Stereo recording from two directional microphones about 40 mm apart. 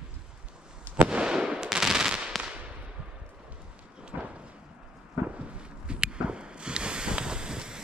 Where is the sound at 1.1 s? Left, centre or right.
Right.